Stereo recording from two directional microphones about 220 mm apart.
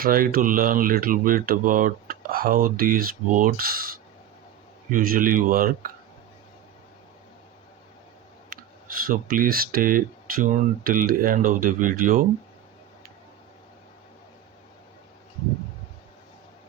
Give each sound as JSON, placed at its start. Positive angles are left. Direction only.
{"t": 0.0, "sound": "speech", "side_deg": -40}
{"t": 8.4, "sound": "speech", "side_deg": -40}